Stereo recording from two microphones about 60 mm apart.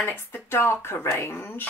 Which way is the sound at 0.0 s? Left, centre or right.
Left.